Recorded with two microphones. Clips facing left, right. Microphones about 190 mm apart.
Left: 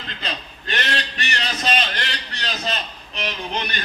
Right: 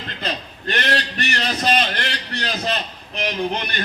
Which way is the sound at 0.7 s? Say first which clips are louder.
Right 4 dB; 55° right (ahead or behind).